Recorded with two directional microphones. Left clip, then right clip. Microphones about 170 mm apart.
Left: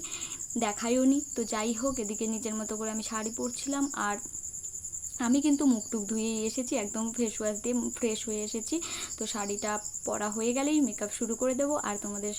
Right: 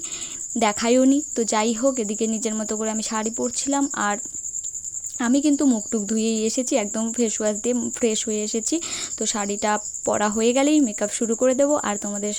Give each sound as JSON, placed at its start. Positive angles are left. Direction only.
{"t": 0.6, "sound": "speech", "side_deg": -50}